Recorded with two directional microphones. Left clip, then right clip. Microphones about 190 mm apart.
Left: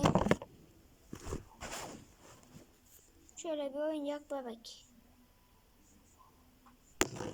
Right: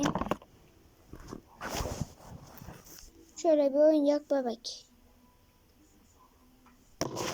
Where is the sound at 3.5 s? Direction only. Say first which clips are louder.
Right 13 dB; 25° right (ahead or behind).